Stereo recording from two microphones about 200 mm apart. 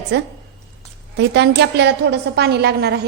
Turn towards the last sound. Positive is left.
turn(degrees=-55)  # may be behind; listen again after turning